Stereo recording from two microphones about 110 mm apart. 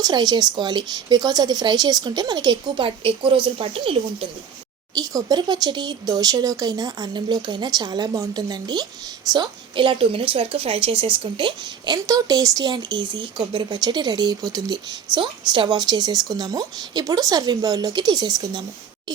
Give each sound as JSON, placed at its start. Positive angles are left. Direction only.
{"t": 0.0, "sound": "speech", "side_deg": -40}
{"t": 4.9, "sound": "a woman's voice", "side_deg": -35}
{"t": 12.0, "sound": "speech", "side_deg": -30}